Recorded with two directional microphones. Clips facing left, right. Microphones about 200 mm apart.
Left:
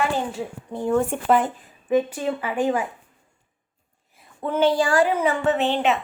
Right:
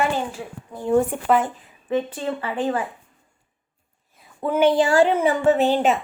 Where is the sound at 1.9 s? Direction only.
10° left (ahead or behind).